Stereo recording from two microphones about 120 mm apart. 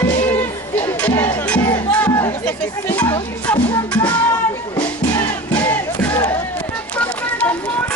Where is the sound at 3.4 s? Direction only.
10° left (ahead or behind).